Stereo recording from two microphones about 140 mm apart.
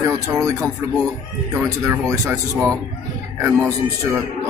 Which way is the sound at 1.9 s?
20° right (ahead or behind).